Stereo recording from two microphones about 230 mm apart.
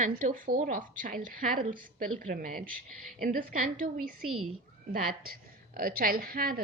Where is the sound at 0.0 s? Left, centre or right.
Right.